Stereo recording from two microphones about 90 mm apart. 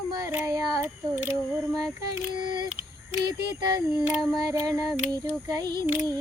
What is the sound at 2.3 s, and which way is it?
Female singing, 55° right (ahead or behind).